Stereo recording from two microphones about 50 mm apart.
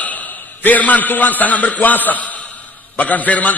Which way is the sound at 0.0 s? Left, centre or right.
Left.